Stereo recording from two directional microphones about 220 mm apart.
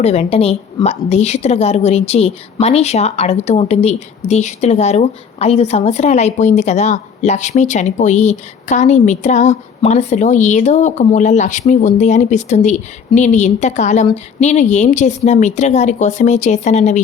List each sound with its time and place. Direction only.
0.0 s a woman's voice: 30° left (ahead or behind)